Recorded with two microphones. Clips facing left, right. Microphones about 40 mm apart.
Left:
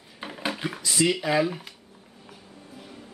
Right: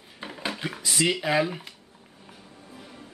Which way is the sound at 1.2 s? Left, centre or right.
Centre.